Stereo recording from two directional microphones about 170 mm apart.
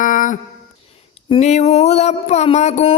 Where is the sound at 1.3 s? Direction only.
40° left (ahead or behind).